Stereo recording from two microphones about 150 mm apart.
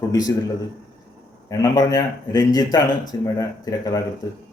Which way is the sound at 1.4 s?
25° left (ahead or behind).